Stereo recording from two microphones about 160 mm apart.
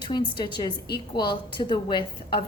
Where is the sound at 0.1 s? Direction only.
30° left (ahead or behind).